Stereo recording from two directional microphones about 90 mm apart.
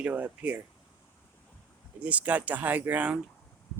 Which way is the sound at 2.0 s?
15° right (ahead or behind).